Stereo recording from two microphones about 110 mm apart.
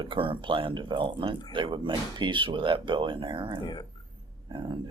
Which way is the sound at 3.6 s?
45° left (ahead or behind).